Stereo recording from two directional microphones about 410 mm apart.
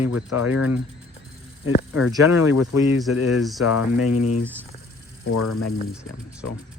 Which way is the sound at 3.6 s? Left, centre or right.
Left.